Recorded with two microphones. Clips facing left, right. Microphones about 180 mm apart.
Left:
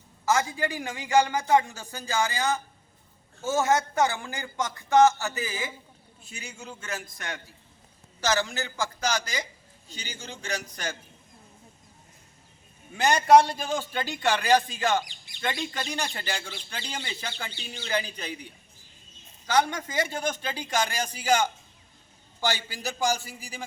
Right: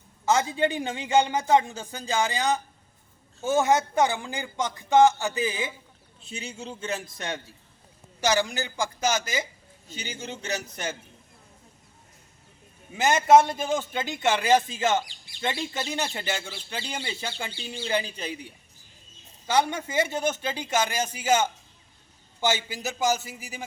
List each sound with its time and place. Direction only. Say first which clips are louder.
0.3 s a man's voice: right 3 dB; 20° right (ahead or behind)
13.0 s a man's voice: even; 20° right (ahead or behind)
16.3 s a man's voice: right 3 dB; 5° right (ahead or behind)
17.8 s a man's voice: right 2 dB; 30° right (ahead or behind)
19.5 s a man's voice: right 1 dB; 25° right (ahead or behind)